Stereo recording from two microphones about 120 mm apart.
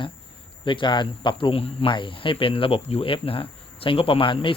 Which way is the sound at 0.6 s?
45° left (ahead or behind).